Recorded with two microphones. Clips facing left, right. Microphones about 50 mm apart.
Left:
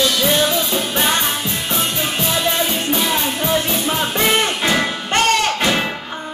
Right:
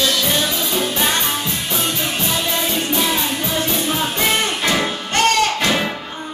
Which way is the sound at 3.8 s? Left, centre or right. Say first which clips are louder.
Left 1 dB; centre.